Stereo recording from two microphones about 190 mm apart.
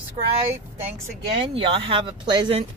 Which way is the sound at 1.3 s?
30° right (ahead or behind).